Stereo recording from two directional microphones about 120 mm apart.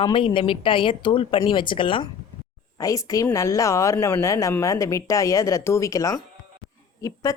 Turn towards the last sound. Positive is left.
turn(degrees=25)  # may be behind; listen again after turning